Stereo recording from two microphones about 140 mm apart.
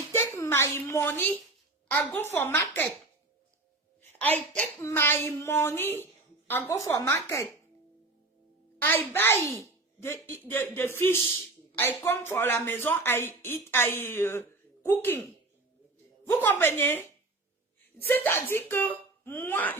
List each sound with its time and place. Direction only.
0.1 s a sound: 15° left (ahead or behind)
1.9 s speech: 10° left (ahead or behind)
4.0 s a woman's voice: 10° left (ahead or behind)
8.8 s a child's voice: 15° left (ahead or behind)
16.2 s speech: 15° left (ahead or behind)
18.1 s speech: 15° left (ahead or behind)